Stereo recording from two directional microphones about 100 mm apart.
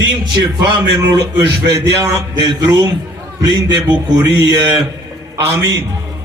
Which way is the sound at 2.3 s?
45° right (ahead or behind).